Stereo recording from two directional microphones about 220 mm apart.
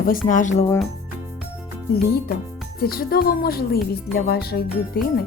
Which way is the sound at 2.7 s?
45° left (ahead or behind).